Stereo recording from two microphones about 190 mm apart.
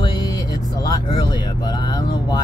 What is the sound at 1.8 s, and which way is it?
Speech, 20° left (ahead or behind).